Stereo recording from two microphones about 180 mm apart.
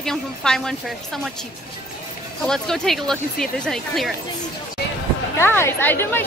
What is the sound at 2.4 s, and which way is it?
Speech, 5° left (ahead or behind).